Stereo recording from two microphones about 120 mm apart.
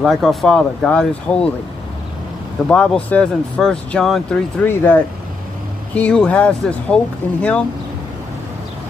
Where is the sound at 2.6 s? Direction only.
10° left (ahead or behind).